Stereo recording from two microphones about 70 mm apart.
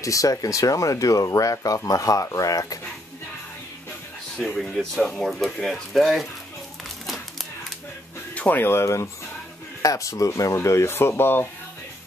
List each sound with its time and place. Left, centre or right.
0.0 s speech: left
4.6 s speech: centre
8.4 s speech: left
10.5 s speech: left